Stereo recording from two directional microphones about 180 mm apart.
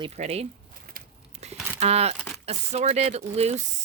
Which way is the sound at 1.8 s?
35° right (ahead or behind).